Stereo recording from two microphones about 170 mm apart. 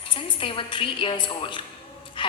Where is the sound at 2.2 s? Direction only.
30° left (ahead or behind).